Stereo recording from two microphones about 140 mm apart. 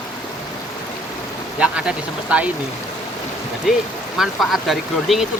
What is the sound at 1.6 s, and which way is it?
Speech, 10° right (ahead or behind).